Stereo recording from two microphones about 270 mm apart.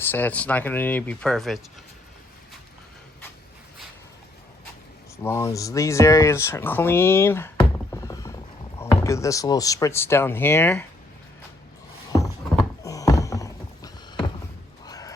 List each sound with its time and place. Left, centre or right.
0.1 s speech: centre
5.1 s speech: centre
12.8 s a sound: centre